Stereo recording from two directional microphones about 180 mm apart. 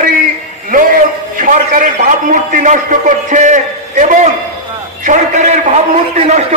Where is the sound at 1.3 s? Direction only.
50° right (ahead or behind).